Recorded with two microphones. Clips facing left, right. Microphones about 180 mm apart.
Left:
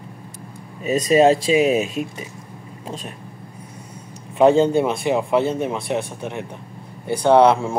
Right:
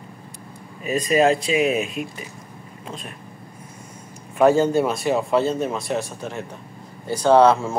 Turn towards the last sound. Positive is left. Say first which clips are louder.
# left 1 dB
turn(degrees=15)  # may be behind; listen again after turning